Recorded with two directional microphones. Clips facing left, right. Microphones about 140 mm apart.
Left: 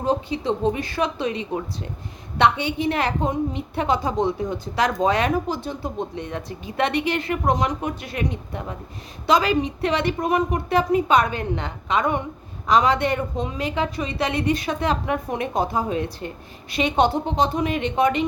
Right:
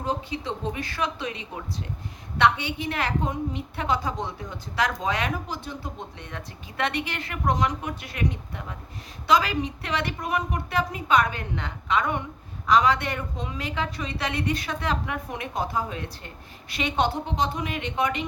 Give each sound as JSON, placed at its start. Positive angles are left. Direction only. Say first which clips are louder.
{"t": 0.0, "sound": "speech", "louder": "left 6 dB", "side_deg": 25}